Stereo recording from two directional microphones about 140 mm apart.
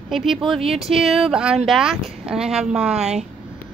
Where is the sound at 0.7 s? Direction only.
Centre (ahead or behind).